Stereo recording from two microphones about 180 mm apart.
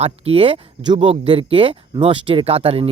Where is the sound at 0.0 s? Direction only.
30° right (ahead or behind).